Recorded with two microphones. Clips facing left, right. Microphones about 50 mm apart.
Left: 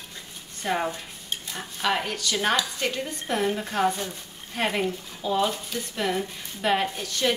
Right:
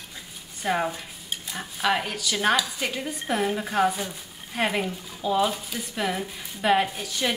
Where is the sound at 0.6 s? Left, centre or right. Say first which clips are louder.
Right 1 dB; centre.